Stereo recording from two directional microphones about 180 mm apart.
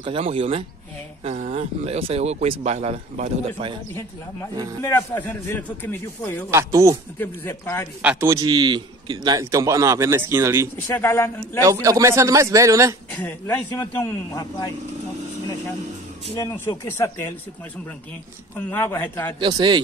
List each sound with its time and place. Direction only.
0.0 s a man's voice: 30° right (ahead or behind)
4.8 s speech: 10° left (ahead or behind)
6.5 s a man's voice: 15° right (ahead or behind)
7.2 s speech: 15° left (ahead or behind)
8.0 s a man's voice: 10° right (ahead or behind)
10.9 s speech: 10° left (ahead or behind)
11.6 s a man's voice: 20° right (ahead or behind)
13.1 s speech: 10° left (ahead or behind)
16.3 s speech: 15° left (ahead or behind)
18.6 s speech: 10° left (ahead or behind)
19.4 s a man's voice: 25° right (ahead or behind)